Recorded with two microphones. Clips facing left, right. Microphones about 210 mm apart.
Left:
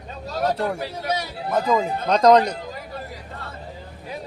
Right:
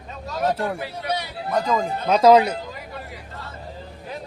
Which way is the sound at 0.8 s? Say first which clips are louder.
Left 1 dB; 45° left (ahead or behind).